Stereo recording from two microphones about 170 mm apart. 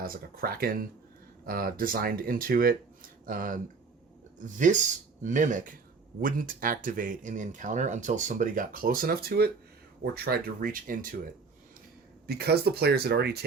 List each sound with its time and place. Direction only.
0.0 s speech: 60° right (ahead or behind)
12.3 s speech: 70° right (ahead or behind)